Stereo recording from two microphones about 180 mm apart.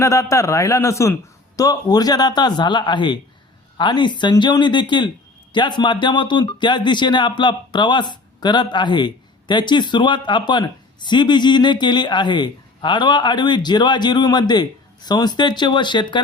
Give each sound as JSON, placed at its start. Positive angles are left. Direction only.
{"t": 0.0, "sound": "a man's voice", "side_deg": 15}